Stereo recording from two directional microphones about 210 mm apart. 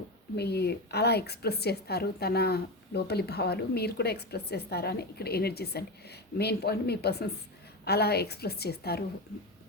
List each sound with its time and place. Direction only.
0.3 s a woman's voice: 50° left (ahead or behind)